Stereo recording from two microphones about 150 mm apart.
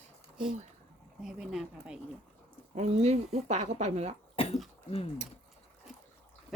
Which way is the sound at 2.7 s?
45° right (ahead or behind).